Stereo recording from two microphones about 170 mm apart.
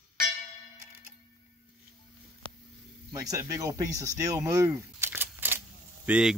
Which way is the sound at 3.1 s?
20° right (ahead or behind).